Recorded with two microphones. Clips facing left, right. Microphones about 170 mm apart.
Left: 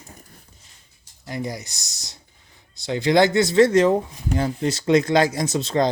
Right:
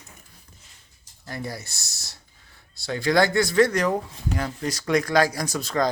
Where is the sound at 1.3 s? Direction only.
15° left (ahead or behind).